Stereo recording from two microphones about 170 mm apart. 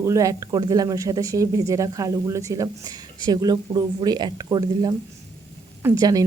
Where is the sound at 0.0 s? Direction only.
20° right (ahead or behind).